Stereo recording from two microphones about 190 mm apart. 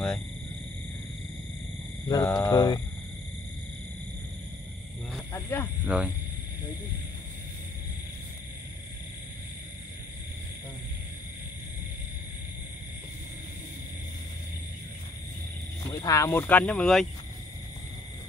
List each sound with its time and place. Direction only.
2.0 s mantra: 20° left (ahead or behind)
5.1 s a sound: 10° left (ahead or behind)
5.9 s speech: 5° right (ahead or behind)
15.9 s speech: 15° left (ahead or behind)